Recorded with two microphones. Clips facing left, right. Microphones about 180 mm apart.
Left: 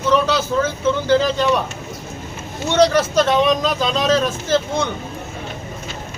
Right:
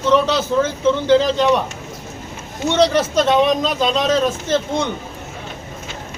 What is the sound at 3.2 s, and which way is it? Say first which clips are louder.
Speech: right 1 dB; 25° right (ahead or behind).